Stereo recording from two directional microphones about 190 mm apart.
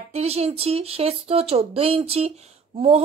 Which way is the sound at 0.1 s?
35° right (ahead or behind).